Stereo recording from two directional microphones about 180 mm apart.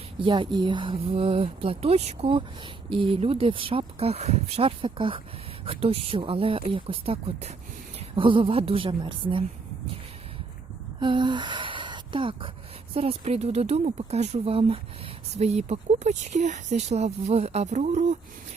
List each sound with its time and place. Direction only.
0.2 s speech: 25° right (ahead or behind)
11.0 s speech: 25° right (ahead or behind)